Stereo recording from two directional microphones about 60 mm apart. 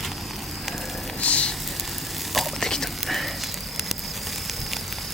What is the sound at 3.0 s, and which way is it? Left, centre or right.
Fire, centre.